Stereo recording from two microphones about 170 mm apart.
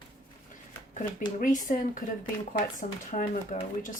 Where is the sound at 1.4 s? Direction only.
50° left (ahead or behind).